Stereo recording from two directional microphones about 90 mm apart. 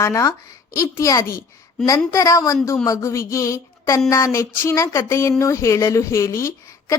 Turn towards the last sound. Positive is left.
turn(degrees=30)  # may be behind; listen again after turning